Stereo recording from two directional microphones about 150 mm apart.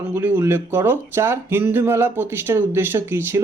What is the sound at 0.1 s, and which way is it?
Speech, 15° right (ahead or behind).